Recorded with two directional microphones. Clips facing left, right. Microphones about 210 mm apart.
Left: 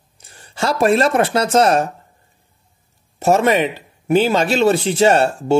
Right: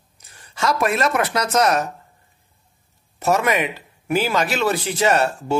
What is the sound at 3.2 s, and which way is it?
Speech, 30° left (ahead or behind).